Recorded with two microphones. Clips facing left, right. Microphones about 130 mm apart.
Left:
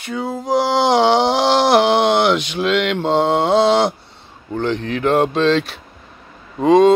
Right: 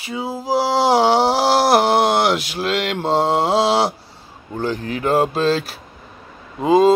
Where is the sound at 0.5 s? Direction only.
35° right (ahead or behind).